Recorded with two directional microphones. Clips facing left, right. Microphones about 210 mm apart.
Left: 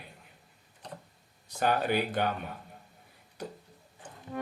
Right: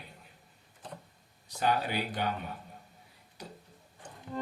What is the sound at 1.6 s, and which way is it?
Speech, 50° left (ahead or behind).